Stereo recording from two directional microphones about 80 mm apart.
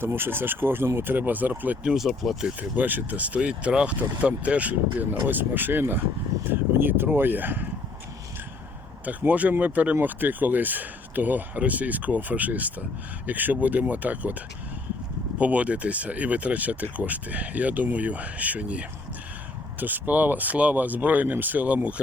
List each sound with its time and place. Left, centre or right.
0.0 s speech: right; by 2.5 s centre
2.6 s speech: right
9.0 s speech: centre
15.4 s speech: centre